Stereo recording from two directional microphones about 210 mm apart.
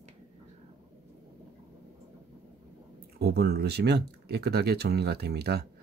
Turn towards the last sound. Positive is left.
turn(degrees=-50)  # may be behind; listen again after turning